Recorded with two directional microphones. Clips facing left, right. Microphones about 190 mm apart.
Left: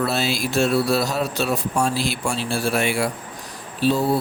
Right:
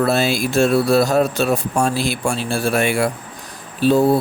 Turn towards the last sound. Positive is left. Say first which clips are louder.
# right 5 dB
turn(degrees=-50)  # may be behind; listen again after turning